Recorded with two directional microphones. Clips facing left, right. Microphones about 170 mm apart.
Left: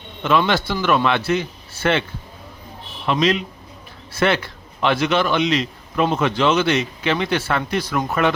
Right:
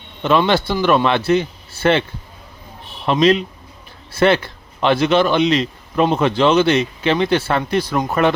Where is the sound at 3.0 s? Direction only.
35° right (ahead or behind).